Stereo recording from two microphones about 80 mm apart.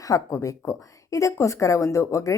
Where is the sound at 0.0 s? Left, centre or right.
Left.